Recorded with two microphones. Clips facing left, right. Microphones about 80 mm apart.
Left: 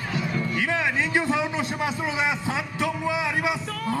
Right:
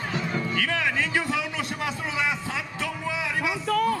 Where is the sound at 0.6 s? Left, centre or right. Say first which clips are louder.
Left 2 dB; left.